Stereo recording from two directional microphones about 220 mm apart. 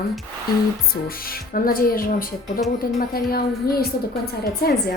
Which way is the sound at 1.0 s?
40° left (ahead or behind).